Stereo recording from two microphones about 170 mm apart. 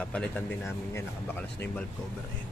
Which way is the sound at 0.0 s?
10° left (ahead or behind).